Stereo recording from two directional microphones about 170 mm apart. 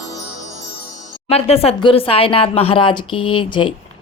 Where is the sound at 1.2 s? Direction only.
35° left (ahead or behind).